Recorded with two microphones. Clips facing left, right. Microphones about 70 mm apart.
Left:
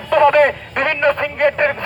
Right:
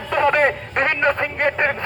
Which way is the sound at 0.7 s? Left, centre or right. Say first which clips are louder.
Left 2 dB; right.